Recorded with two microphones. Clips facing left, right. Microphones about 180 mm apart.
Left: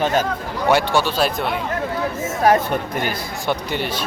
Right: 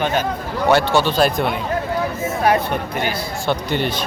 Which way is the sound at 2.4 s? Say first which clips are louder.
Left 2 dB; 45° left (ahead or behind).